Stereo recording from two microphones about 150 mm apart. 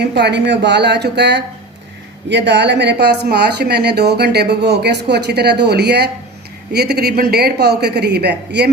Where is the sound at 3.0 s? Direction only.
90° right.